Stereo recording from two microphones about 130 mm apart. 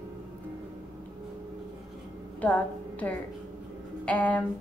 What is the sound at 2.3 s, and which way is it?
A woman's voice, 10° left (ahead or behind).